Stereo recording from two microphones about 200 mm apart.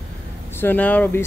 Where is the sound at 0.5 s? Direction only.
10° left (ahead or behind).